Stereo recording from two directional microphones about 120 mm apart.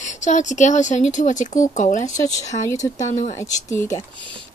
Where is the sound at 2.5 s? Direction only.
70° left (ahead or behind).